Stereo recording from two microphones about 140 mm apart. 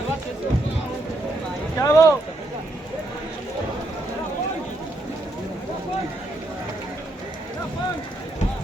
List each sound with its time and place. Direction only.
1.8 s speech: 20° left (ahead or behind)